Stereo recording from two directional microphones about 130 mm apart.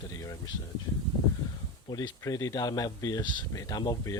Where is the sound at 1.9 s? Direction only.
25° left (ahead or behind).